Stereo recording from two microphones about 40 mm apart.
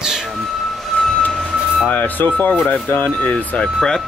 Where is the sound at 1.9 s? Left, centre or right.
Left.